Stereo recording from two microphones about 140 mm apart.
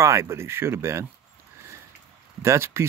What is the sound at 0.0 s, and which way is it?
Speech, 20° right (ahead or behind).